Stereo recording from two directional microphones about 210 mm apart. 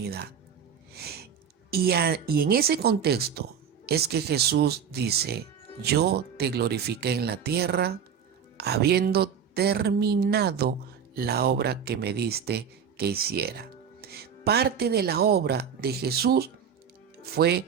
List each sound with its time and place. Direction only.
0.0 s speech: 50° right (ahead or behind)
0.9 s music: 50° right (ahead or behind)
1.7 s speech: 50° right (ahead or behind)